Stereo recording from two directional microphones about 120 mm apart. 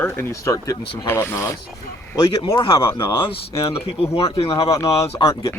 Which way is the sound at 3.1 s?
45° left (ahead or behind).